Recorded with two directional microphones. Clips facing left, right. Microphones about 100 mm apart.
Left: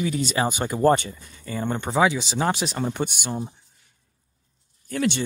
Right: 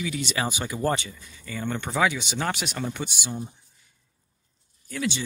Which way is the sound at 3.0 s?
50° left (ahead or behind).